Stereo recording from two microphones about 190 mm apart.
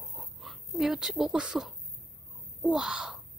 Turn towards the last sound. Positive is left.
turn(degrees=-5)  # may be behind; listen again after turning